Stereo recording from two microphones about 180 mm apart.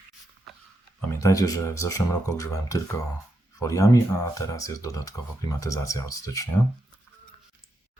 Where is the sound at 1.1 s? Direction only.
15° left (ahead or behind).